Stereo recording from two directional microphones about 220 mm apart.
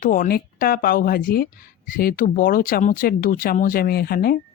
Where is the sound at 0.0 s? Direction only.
40° left (ahead or behind).